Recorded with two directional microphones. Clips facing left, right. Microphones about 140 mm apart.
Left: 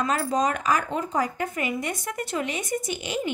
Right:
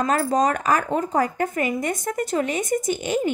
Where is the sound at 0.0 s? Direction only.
40° right (ahead or behind).